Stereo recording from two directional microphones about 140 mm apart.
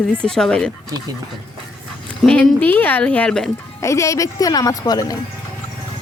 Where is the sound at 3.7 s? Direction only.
20° left (ahead or behind).